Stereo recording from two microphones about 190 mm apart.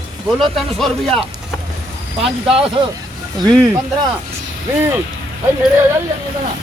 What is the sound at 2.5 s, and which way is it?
Speech, 30° right (ahead or behind).